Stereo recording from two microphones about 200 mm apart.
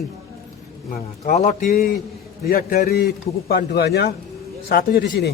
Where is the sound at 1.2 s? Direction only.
40° left (ahead or behind); by 5.3 s 55° left (ahead or behind).